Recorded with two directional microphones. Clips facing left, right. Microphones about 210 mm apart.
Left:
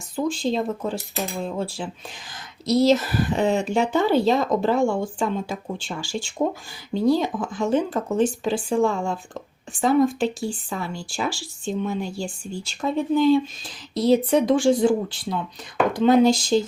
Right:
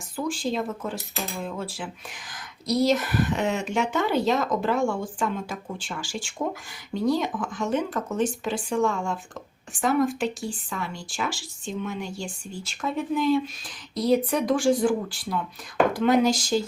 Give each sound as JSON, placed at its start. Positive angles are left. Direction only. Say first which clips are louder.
{"t": 0.2, "sound": "speech", "louder": "left 4 dB", "side_deg": 25}
{"t": 11.3, "sound": "speech", "louder": "left 5 dB", "side_deg": 0}
{"t": 11.7, "sound": "speech", "louder": "left 5 dB", "side_deg": 35}